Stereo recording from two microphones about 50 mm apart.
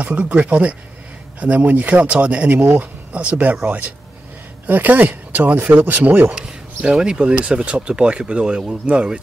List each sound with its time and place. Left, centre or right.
0.0 s speech: right
2.5 s speech: right
3.1 s speech: right
6.8 s speech: right